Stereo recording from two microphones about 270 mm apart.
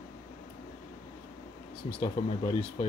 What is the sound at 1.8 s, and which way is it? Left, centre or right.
Speech, left.